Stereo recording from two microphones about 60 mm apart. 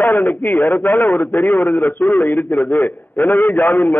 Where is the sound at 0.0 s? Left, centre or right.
Left.